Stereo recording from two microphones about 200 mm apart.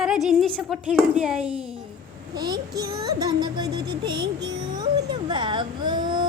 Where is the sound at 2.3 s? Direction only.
20° right (ahead or behind).